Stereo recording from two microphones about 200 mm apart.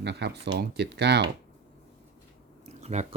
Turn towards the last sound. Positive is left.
turn(degrees=-35)  # may be behind; listen again after turning